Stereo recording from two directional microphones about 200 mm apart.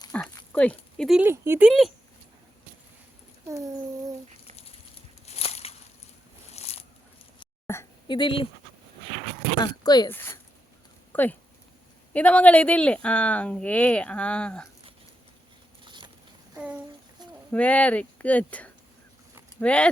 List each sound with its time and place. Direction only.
0.1 s speech: 5° left (ahead or behind)
5.2 s a sound: 30° left (ahead or behind)
8.0 s speech: 25° left (ahead or behind)
9.6 s speech: 20° left (ahead or behind)
15.8 s a sound: 25° right (ahead or behind)
17.5 s speech: 5° left (ahead or behind)